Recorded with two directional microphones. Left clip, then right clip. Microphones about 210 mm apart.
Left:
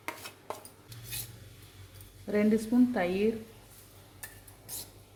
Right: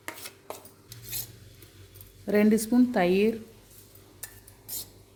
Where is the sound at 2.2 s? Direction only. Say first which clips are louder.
Right 5 dB; 50° right (ahead or behind).